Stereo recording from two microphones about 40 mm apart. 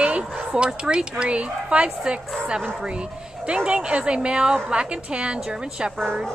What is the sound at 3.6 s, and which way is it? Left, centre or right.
A woman's voice, right.